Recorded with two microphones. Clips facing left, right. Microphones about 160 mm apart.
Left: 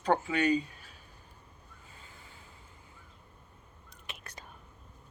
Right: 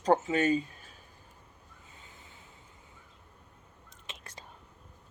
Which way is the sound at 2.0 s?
20° right (ahead or behind).